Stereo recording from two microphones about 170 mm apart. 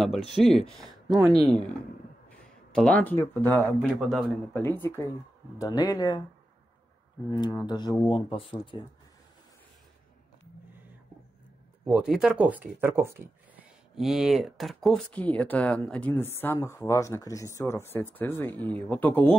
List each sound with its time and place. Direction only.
0.4 s speech: centre (ahead or behind)
1.1 s speech: 25° right (ahead or behind)
1.4 s speech: centre (ahead or behind); by 6.2 s 25° left (ahead or behind)
7.3 s speech: 25° left (ahead or behind)
11.8 s speech: 5° right (ahead or behind)
13.9 s speech: centre (ahead or behind)